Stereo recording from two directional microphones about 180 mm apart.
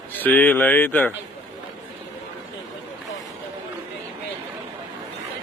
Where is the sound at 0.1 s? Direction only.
10° left (ahead or behind).